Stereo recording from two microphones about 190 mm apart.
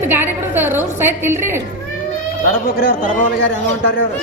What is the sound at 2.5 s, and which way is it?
Speech, 50° left (ahead or behind).